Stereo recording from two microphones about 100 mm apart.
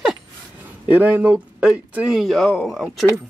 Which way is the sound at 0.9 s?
15° right (ahead or behind).